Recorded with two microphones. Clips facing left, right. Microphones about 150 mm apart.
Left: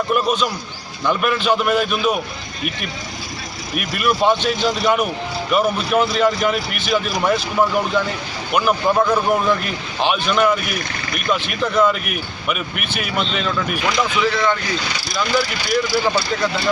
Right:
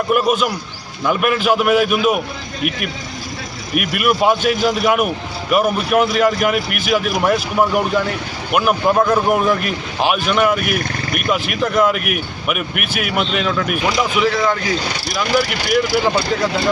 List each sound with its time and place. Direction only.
0.1 s speech: 5° right (ahead or behind)
3.8 s speech: 5° right (ahead or behind)
14.8 s speech: 55° right (ahead or behind)
15.1 s speech: 10° right (ahead or behind)